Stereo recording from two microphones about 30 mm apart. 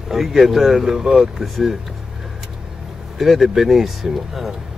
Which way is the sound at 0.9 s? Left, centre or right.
Centre.